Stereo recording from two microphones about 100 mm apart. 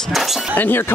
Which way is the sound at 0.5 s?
20° left (ahead or behind).